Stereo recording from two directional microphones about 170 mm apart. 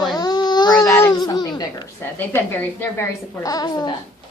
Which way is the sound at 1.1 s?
25° left (ahead or behind).